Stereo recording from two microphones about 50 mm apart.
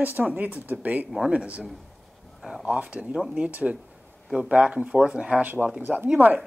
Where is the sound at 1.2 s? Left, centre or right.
Right.